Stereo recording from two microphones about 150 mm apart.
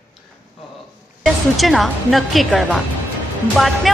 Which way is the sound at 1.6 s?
Centre (ahead or behind).